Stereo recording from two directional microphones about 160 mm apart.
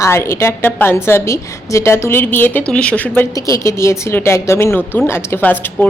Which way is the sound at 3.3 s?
20° left (ahead or behind).